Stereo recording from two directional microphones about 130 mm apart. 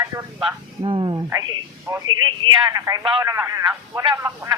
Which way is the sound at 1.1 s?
25° right (ahead or behind).